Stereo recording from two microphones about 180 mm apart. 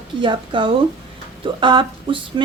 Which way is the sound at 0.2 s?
25° right (ahead or behind).